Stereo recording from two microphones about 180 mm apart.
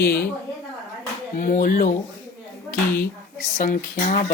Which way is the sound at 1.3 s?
45° left (ahead or behind).